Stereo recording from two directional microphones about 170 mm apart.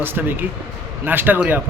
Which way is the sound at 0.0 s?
10° right (ahead or behind).